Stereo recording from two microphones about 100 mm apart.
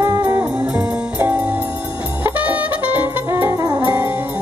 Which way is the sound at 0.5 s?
10° right (ahead or behind).